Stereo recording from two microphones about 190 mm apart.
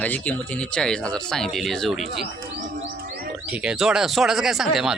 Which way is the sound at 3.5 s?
5° right (ahead or behind).